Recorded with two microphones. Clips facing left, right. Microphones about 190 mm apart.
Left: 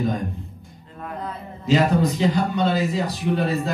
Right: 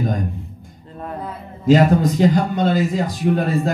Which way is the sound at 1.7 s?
50° right (ahead or behind).